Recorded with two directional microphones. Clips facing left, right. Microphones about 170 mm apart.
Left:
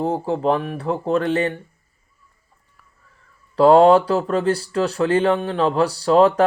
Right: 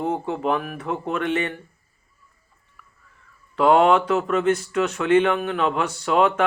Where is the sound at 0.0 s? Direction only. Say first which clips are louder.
Left 4 dB; 35° left (ahead or behind).